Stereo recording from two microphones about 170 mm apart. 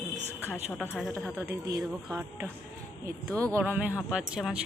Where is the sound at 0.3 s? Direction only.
10° left (ahead or behind).